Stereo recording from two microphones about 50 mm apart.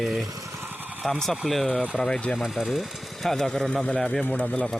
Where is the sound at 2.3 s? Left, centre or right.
Centre.